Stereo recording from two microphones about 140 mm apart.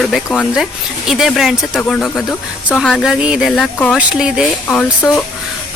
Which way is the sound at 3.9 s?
5° right (ahead or behind).